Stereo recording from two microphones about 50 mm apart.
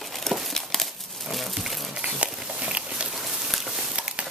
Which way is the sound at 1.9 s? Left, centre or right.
Right.